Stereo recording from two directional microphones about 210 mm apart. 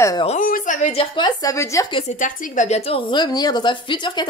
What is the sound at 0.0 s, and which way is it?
Speech, 15° left (ahead or behind).